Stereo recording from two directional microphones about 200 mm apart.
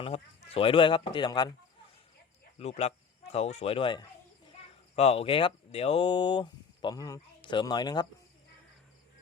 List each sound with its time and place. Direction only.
0.0 s speech: 25° left (ahead or behind)
2.6 s speech: 30° left (ahead or behind)